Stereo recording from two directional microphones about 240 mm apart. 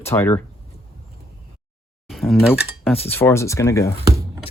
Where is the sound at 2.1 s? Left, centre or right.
Centre.